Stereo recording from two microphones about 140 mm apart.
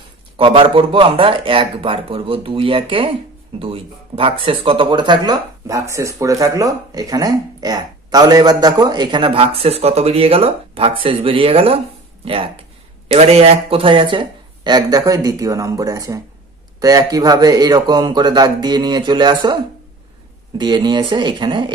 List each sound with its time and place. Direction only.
0.4 s speech: 40° right (ahead or behind)